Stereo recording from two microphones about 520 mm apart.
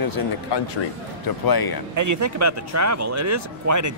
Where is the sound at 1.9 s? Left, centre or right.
Right.